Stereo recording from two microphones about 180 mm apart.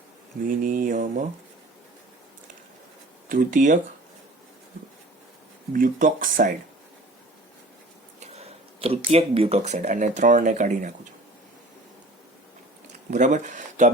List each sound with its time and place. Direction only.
0.4 s speech: 50° right (ahead or behind)
3.2 s speech: 45° right (ahead or behind)
5.7 s speech: 50° right (ahead or behind)
8.2 s speech: 35° right (ahead or behind)
13.1 s speech: 45° right (ahead or behind)